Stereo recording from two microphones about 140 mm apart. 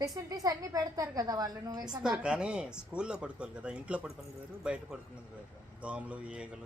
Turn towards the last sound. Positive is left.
turn(degrees=-5)  # may be behind; listen again after turning